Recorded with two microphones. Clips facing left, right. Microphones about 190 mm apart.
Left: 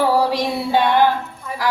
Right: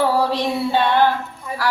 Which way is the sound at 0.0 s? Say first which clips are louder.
Left 1 dB; 10° left (ahead or behind).